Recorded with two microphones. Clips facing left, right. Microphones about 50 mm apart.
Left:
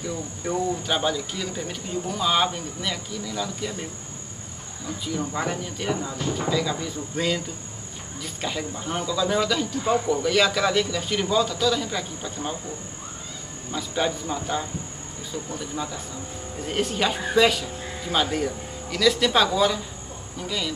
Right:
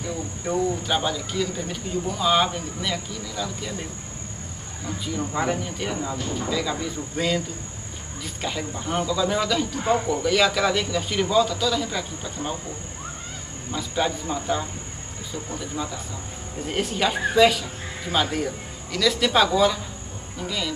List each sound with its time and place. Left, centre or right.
0.5 s speech: centre
5.2 s speech: centre
13.7 s speech: centre
15.7 s speech: centre